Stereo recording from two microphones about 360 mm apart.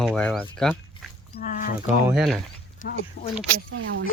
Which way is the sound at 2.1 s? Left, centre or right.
Centre.